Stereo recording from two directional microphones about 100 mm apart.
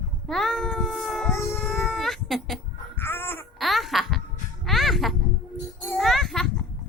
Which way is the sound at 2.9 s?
20° left (ahead or behind).